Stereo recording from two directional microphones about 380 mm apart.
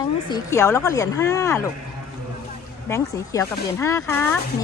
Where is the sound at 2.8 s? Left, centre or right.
Centre.